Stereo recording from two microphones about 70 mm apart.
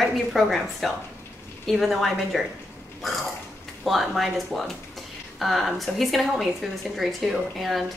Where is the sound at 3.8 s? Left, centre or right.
Centre.